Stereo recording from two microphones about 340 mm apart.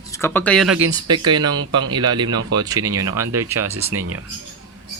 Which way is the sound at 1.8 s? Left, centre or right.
Centre.